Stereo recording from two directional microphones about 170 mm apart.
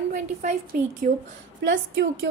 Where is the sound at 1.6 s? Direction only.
90° right.